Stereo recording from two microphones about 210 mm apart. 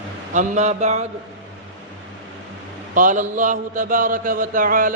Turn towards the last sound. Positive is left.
turn(degrees=-40)  # may be behind; listen again after turning